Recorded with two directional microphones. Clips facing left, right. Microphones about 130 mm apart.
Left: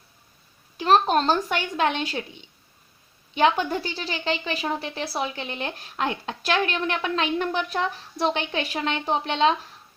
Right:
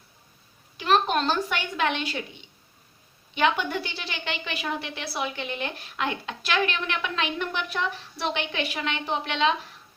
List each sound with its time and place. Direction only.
0.8 s a woman's voice: 40° left (ahead or behind)
3.3 s a woman's voice: 40° left (ahead or behind)